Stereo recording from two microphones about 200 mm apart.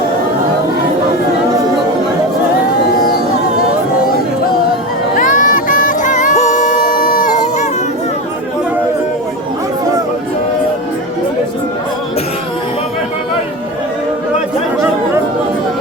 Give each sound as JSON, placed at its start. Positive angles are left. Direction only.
{"t": 5.1, "sound": "music", "side_deg": 40}